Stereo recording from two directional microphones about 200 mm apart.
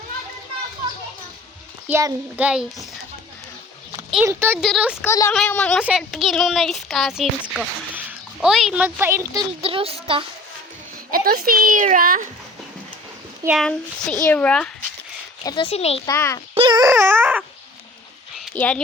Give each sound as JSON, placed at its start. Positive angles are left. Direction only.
{"t": 1.9, "sound": "a child's voice", "side_deg": -15}
{"t": 4.3, "sound": "a child's voice", "side_deg": -10}
{"t": 5.0, "sound": "a child's voice", "side_deg": 15}
{"t": 5.3, "sound": "speech", "side_deg": 5}
{"t": 9.6, "sound": "speech", "side_deg": -30}
{"t": 11.1, "sound": "a child's voice", "side_deg": -45}
{"t": 13.6, "sound": "speech", "side_deg": 0}
{"t": 15.4, "sound": "speech", "side_deg": 25}
{"t": 16.0, "sound": "a child's voice", "side_deg": 15}
{"t": 16.6, "sound": "dog", "side_deg": -20}
{"t": 18.5, "sound": "speech", "side_deg": 5}